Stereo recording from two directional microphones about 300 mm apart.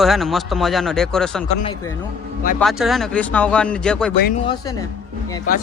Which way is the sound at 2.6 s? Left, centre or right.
Centre.